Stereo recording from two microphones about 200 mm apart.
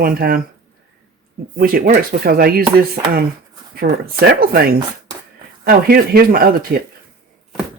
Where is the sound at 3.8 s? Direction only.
45° right (ahead or behind).